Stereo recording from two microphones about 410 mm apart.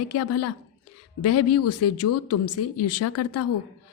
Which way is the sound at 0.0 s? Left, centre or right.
Left.